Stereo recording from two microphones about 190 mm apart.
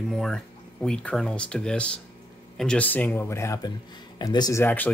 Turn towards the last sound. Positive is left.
turn(degrees=10)  # may be behind; listen again after turning